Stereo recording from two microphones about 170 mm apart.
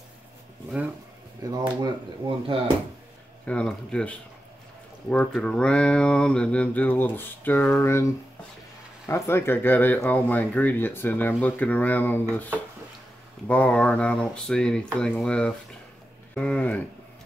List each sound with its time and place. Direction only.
1.5 s speech: 25° right (ahead or behind)
3.4 s speech: 5° left (ahead or behind)
13.5 s speech: 5° left (ahead or behind)